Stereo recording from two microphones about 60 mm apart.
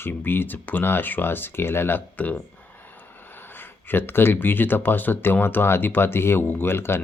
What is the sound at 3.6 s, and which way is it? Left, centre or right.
Speech, left.